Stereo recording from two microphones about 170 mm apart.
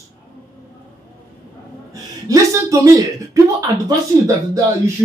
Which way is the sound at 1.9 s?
20° right (ahead or behind).